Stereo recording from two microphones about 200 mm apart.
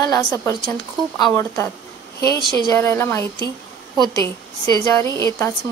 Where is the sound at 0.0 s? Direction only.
20° left (ahead or behind).